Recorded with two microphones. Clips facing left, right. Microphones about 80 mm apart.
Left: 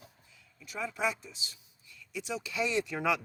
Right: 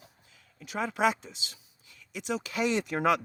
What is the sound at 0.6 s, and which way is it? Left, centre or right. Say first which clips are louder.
Speech: right 6 dB; right.